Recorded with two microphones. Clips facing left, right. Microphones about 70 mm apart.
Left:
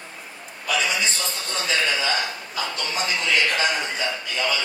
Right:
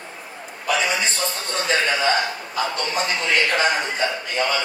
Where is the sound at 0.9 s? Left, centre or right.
Right.